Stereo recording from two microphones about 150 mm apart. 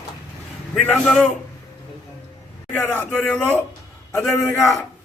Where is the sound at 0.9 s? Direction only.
5° left (ahead or behind).